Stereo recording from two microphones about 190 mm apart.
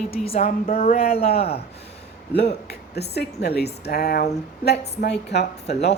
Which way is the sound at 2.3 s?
60° left (ahead or behind).